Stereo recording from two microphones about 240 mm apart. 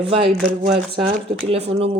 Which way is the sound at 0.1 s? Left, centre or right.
Right.